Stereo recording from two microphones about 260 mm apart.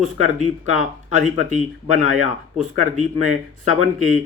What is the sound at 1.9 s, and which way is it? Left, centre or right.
Speech, right.